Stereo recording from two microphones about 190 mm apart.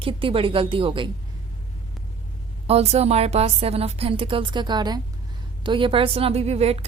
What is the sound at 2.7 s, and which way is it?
A woman's voice, 35° right (ahead or behind).